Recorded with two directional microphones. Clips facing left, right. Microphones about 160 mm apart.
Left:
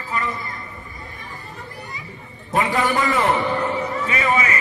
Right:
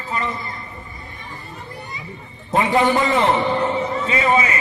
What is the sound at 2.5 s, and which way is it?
A man's voice, 25° right (ahead or behind).